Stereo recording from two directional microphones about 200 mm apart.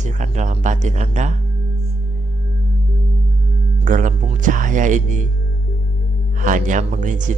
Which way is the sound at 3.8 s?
40° right (ahead or behind).